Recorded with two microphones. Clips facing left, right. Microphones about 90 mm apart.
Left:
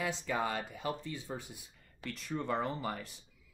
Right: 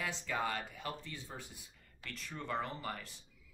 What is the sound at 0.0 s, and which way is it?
Speech, 20° left (ahead or behind).